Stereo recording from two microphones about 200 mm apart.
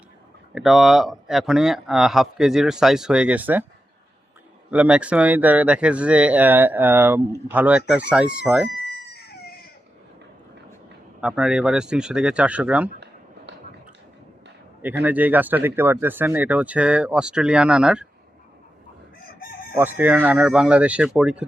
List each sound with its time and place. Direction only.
0.5 s speech: centre (ahead or behind)
4.7 s speech: 5° right (ahead or behind)
9.1 s chicken: 50° left (ahead or behind)
11.2 s speech: 5° right (ahead or behind)
13.0 s a sound: 60° right (ahead or behind)
14.8 s speech: 10° right (ahead or behind)
19.7 s speech: 10° right (ahead or behind)